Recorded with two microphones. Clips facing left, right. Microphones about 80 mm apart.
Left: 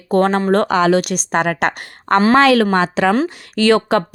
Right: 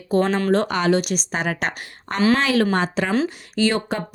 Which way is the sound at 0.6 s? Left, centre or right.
Left.